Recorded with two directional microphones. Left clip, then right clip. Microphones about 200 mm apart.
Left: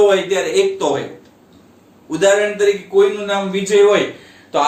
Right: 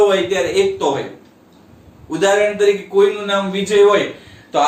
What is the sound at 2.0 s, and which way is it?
Speech, 35° left (ahead or behind).